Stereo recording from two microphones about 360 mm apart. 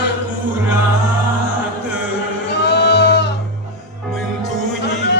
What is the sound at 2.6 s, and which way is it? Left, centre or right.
Music, left.